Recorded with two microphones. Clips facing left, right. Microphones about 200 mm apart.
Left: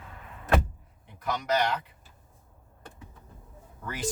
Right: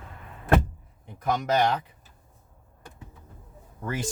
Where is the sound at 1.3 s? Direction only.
50° right (ahead or behind).